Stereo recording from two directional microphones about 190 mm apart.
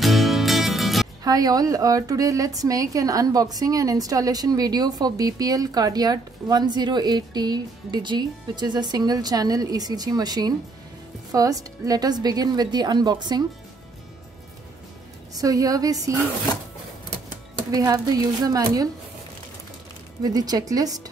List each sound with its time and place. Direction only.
0.0 s music: centre (ahead or behind)
1.2 s a woman's voice: 20° right (ahead or behind)
15.3 s a woman's voice: 20° right (ahead or behind)
17.6 s a woman's voice: 20° right (ahead or behind)
20.2 s a woman's voice: 20° right (ahead or behind)